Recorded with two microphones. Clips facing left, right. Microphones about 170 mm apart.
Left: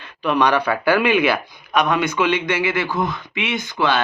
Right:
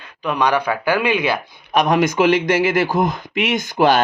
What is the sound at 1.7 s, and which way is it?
Speech, 35° right (ahead or behind).